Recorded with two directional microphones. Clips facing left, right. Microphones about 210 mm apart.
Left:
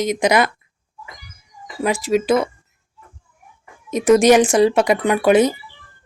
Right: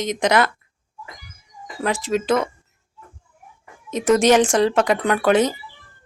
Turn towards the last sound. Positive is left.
turn(degrees=10)  # may be behind; listen again after turning